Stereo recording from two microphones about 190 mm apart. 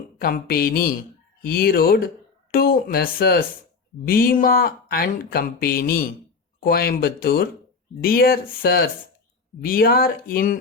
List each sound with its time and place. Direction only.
0.2 s speech: 50° left (ahead or behind)